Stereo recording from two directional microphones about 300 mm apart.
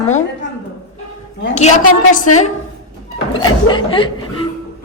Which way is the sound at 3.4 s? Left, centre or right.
Centre.